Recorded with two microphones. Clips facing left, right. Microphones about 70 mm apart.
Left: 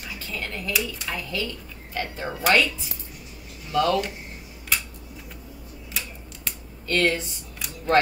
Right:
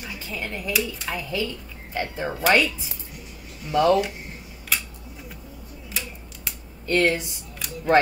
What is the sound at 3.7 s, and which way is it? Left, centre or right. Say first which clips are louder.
Speech: right 3 dB; right.